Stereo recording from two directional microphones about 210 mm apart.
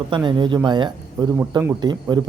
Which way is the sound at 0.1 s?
20° right (ahead or behind).